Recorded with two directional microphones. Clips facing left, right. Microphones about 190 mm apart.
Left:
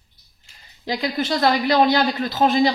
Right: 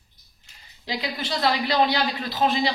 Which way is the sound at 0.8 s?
45° left (ahead or behind).